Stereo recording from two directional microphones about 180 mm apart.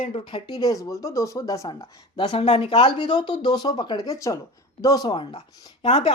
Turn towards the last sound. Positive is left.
turn(degrees=35)  # may be behind; listen again after turning